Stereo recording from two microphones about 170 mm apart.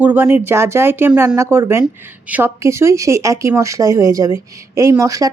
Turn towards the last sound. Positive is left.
turn(degrees=-20)  # may be behind; listen again after turning